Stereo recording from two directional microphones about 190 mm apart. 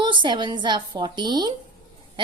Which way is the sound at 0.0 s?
25° right (ahead or behind).